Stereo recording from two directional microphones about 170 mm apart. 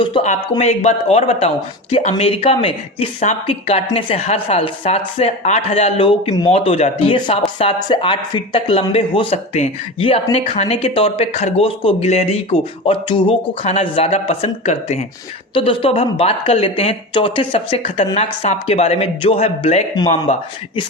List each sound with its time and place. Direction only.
0.6 s speech: 40° left (ahead or behind)